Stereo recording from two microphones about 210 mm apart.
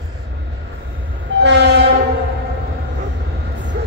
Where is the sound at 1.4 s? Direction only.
55° right (ahead or behind).